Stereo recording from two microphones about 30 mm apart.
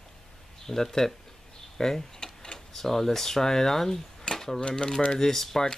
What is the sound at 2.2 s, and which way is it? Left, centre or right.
Tick-tock, left.